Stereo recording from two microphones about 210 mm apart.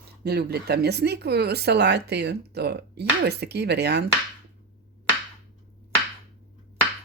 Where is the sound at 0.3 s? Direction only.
50° right (ahead or behind).